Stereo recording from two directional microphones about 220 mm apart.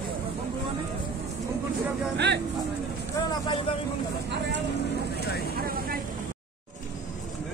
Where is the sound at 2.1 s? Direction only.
50° right (ahead or behind).